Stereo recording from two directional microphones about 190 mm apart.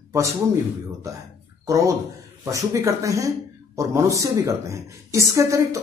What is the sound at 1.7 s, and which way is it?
Speech, 15° right (ahead or behind).